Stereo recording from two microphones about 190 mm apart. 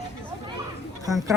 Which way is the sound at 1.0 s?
20° right (ahead or behind).